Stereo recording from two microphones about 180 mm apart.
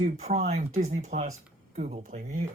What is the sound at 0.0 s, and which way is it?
Speech, 40° right (ahead or behind).